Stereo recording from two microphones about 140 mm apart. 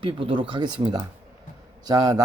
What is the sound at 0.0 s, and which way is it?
A man's voice, 40° right (ahead or behind).